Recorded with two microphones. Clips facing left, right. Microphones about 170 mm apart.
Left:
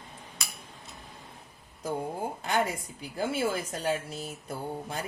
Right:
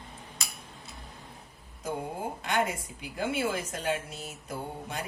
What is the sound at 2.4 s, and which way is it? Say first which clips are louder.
A woman's voice: even; 35° left (ahead or behind).